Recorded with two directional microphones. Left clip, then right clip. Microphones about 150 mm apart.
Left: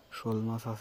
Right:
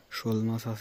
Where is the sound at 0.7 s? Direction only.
70° right (ahead or behind).